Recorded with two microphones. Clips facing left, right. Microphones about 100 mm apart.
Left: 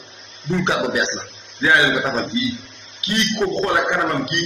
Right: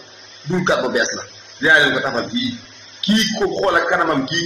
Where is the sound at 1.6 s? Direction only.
25° right (ahead or behind).